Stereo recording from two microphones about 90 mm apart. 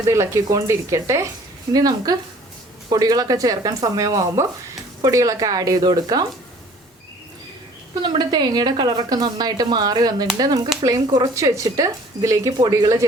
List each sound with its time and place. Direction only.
0.1 s speech: 30° right (ahead or behind)
1.7 s a woman's voice: 45° right (ahead or behind)
8.0 s a woman's voice: 60° right (ahead or behind); by 12.5 s 35° right (ahead or behind)
12.5 s a woman's voice: 50° right (ahead or behind)